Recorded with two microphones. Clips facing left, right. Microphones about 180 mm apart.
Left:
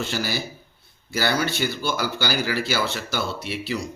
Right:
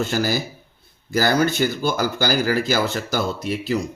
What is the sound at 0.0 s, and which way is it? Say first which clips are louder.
A man's voice: right 5 dB; 45° right (ahead or behind).